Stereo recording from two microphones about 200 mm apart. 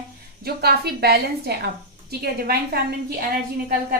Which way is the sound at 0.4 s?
50° right (ahead or behind).